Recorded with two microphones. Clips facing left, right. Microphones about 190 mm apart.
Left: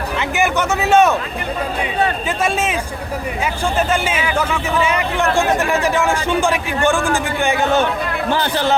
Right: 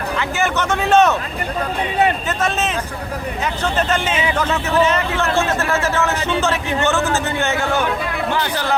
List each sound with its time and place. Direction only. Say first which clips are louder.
0.2 s speech: left 3 dB; 15° left (ahead or behind)
2.4 s a man's voice: left 3 dB; 10° left (ahead or behind); by 8.7 s 30° left (ahead or behind)